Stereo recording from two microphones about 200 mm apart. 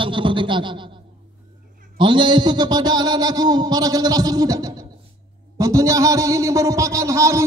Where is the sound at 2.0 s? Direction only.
25° right (ahead or behind).